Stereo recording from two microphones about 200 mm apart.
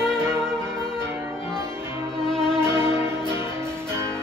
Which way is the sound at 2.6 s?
15° right (ahead or behind).